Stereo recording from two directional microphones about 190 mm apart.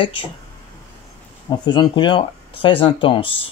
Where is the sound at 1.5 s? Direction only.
20° left (ahead or behind).